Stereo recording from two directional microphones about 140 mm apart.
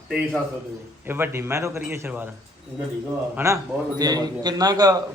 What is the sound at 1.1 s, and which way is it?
A man's voice, 15° right (ahead or behind).